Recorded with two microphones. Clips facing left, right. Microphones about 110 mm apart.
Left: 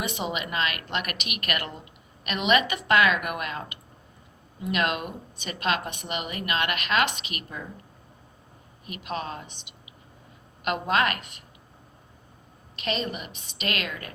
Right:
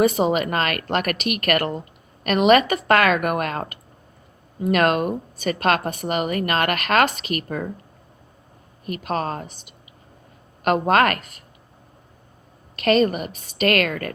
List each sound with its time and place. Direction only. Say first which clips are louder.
0.0 s speech: right 12 dB; 40° right (ahead or behind); by 7.7 s 55° right (ahead or behind)
8.9 s speech: right 8 dB; 45° right (ahead or behind)
12.8 s speech: right 12 dB; 50° right (ahead or behind)